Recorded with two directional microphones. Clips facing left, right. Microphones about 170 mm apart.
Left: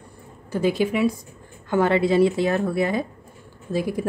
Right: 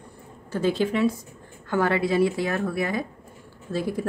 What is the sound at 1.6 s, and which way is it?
A woman's voice, 20° left (ahead or behind).